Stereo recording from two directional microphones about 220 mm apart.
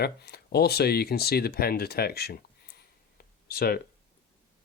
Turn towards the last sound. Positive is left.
turn(degrees=45)  # may be behind; listen again after turning